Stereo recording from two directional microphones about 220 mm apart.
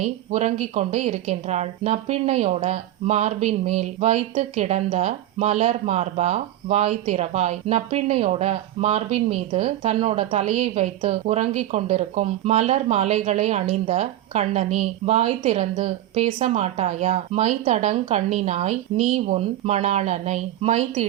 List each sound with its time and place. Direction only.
0.0 s speech: 30° right (ahead or behind)